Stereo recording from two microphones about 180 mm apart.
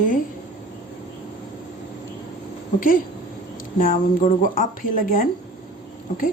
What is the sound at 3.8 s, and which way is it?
A woman's voice, 50° left (ahead or behind).